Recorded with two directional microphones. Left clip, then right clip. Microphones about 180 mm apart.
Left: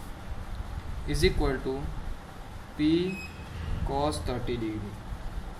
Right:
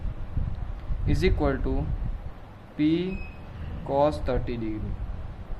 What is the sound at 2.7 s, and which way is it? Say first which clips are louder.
Speech: right 1 dB; 45° right (ahead or behind).